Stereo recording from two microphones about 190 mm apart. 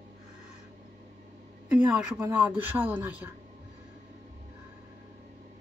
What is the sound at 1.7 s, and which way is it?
Speech, 5° right (ahead or behind).